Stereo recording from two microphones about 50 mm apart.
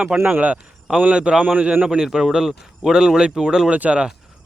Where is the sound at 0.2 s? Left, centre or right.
Right.